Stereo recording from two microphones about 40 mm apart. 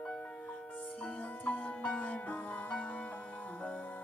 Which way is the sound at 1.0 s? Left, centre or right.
Left.